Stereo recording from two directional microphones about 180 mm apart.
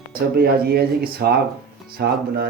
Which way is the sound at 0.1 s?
55° right (ahead or behind).